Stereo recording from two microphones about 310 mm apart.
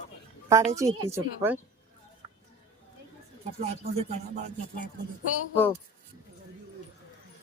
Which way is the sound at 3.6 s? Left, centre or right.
Right.